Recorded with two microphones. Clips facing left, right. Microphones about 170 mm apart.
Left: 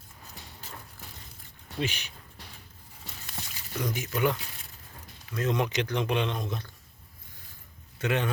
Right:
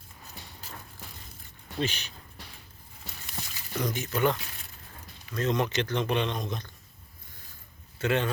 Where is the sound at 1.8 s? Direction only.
10° left (ahead or behind).